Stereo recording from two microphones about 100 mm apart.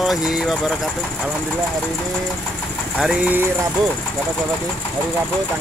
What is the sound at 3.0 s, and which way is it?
Speech, 5° right (ahead or behind).